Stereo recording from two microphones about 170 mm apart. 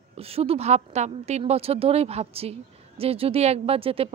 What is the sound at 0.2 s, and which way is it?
A woman's voice, 35° right (ahead or behind).